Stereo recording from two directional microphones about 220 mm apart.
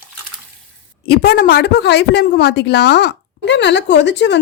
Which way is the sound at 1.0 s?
45° left (ahead or behind).